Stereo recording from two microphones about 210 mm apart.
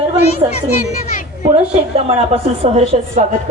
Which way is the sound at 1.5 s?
30° right (ahead or behind).